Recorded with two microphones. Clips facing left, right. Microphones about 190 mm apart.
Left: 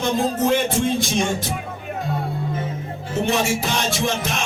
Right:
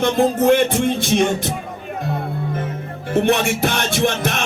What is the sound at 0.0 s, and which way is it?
Music, 60° right (ahead or behind).